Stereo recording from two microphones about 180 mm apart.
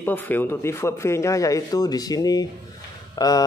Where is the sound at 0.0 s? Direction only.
10° left (ahead or behind).